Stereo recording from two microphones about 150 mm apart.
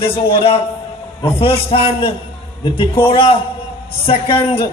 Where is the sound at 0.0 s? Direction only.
40° left (ahead or behind).